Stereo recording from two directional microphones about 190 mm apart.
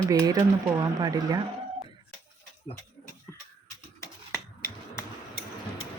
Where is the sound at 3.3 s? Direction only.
15° left (ahead or behind).